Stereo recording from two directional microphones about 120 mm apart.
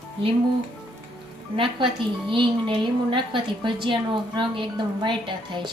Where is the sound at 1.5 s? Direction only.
45° right (ahead or behind).